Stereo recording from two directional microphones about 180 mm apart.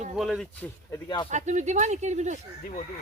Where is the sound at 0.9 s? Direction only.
25° left (ahead or behind).